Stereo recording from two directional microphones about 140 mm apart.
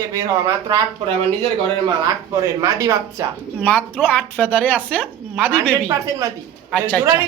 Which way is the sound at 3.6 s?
10° left (ahead or behind).